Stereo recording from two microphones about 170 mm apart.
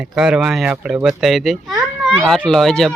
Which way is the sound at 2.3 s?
Centre (ahead or behind).